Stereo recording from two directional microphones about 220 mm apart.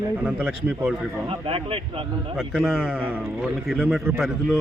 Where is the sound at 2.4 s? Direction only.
Centre (ahead or behind).